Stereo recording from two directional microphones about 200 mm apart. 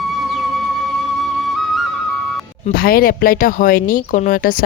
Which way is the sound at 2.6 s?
45° left (ahead or behind).